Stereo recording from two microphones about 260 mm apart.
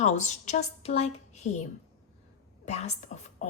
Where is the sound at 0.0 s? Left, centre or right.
Left.